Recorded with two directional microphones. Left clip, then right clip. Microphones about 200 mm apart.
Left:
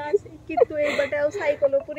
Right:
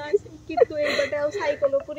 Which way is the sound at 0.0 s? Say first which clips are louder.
Even; 5° right (ahead or behind).